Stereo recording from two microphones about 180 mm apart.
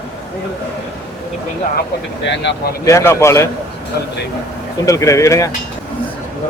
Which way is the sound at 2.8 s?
15° left (ahead or behind).